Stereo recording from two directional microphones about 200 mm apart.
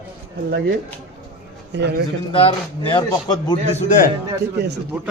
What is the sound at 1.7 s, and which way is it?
Speech, 55° right (ahead or behind).